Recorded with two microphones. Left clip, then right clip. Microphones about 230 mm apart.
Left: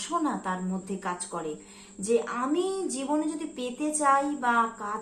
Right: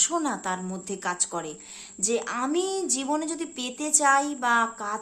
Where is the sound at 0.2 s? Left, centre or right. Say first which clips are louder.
Right 1 dB; right.